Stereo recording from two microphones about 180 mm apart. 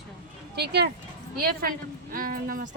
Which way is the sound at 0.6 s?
70° right (ahead or behind).